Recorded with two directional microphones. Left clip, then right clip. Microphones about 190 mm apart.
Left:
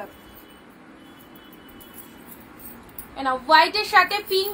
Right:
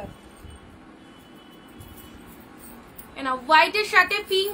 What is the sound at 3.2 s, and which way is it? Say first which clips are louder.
A woman's voice: left 1 dB; 20° right (ahead or behind).